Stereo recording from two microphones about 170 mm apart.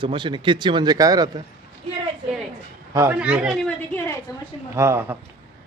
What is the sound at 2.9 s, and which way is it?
Speech, 20° right (ahead or behind).